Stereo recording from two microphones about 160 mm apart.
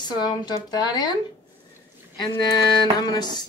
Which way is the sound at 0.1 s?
25° left (ahead or behind).